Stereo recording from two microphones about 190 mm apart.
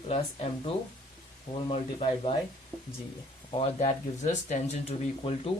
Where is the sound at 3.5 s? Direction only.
35° left (ahead or behind).